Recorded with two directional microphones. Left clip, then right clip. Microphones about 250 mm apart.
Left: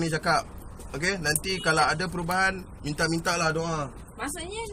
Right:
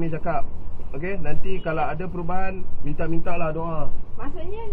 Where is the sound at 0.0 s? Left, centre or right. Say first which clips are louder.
Left 2 dB; left.